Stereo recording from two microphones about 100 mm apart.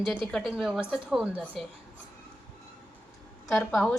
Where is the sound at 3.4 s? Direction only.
5° left (ahead or behind).